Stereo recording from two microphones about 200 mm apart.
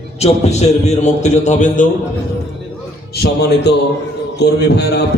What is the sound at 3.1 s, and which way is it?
A man's voice, 55° left (ahead or behind).